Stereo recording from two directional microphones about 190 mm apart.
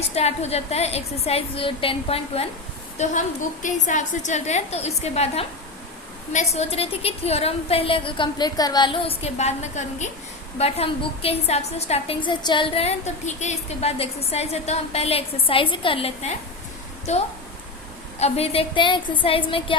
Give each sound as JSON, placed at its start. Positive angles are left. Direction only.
{"t": 0.1, "sound": "a woman's voice", "side_deg": 35}
{"t": 3.0, "sound": "a woman's voice", "side_deg": 40}